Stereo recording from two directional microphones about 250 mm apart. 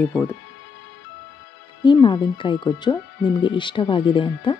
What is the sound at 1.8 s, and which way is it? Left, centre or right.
Speech, centre.